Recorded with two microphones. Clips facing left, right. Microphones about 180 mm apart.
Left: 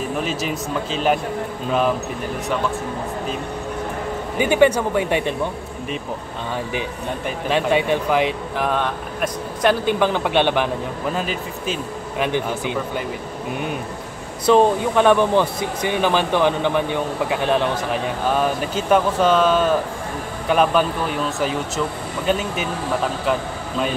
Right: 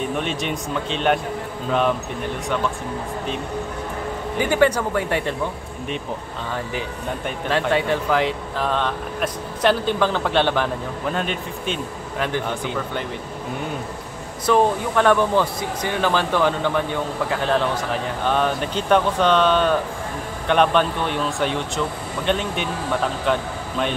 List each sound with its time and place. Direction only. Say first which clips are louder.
0.1 s speech: left 1 dB; centre (ahead or behind)
4.4 s speech: left 3 dB; 20° left (ahead or behind)
7.7 s speech: left 2 dB; 15° left (ahead or behind)
11.1 s speech: even; 5° left (ahead or behind)
12.2 s speech: left 2 dB; 15° left (ahead or behind)
14.4 s speech: left 3 dB; 20° left (ahead or behind); by 22.7 s 5° left (ahead or behind)